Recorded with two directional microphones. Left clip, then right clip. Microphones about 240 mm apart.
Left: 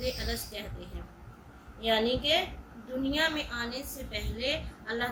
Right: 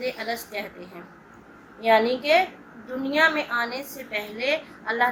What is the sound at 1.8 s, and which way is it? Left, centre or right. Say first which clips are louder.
A woman's voice: right 8 dB; left.